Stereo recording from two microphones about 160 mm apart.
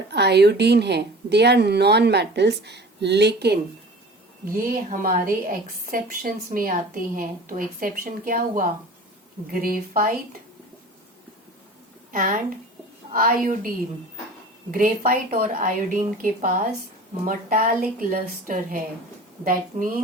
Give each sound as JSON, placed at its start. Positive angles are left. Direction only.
{"t": 0.1, "sound": "a woman's voice", "side_deg": -90}
{"t": 4.5, "sound": "a woman's voice", "side_deg": -60}
{"t": 12.1, "sound": "a woman's voice", "side_deg": -60}
{"t": 14.7, "sound": "a woman's voice", "side_deg": -60}